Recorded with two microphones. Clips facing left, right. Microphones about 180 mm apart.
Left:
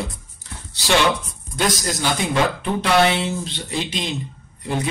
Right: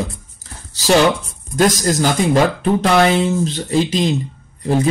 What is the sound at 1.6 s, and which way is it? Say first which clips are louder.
Speech: right 7 dB; 40° right (ahead or behind).